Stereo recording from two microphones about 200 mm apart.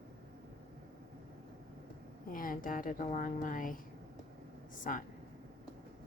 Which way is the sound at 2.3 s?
45° left (ahead or behind).